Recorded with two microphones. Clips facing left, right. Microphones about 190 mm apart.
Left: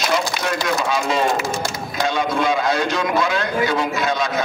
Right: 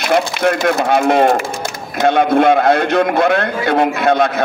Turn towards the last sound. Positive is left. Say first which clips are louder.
# right 8 dB
turn(degrees=-60)  # may be behind; listen again after turning